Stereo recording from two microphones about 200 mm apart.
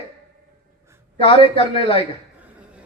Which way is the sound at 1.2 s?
25° left (ahead or behind).